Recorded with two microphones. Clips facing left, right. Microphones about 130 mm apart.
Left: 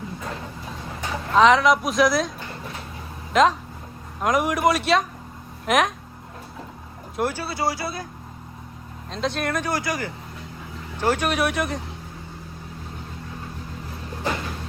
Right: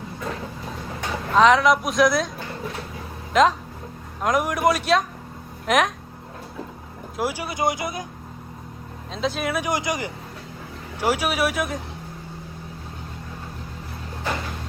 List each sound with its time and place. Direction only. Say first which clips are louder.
1.4 s speech: even; centre (ahead or behind)
3.3 s speech: even; centre (ahead or behind)
7.2 s speech: even; 10° right (ahead or behind)
9.1 s speech: even; centre (ahead or behind); by 10.1 s 20° right (ahead or behind)
11.0 s speech: even; 10° right (ahead or behind)